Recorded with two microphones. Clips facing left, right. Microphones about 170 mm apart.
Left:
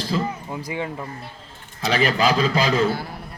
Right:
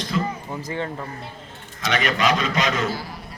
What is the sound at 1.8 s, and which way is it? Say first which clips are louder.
Speech: left 2 dB; 30° left (ahead or behind).